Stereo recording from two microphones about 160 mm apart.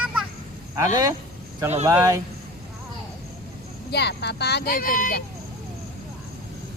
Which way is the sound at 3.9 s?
90° left.